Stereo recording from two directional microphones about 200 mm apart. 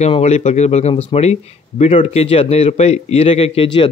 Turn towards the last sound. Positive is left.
turn(degrees=25)  # may be behind; listen again after turning